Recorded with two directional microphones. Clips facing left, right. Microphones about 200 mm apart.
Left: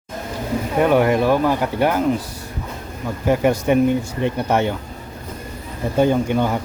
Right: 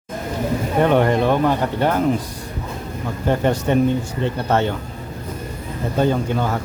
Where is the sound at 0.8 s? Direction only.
10° left (ahead or behind).